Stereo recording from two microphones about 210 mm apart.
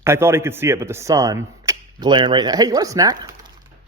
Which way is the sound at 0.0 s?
10° right (ahead or behind).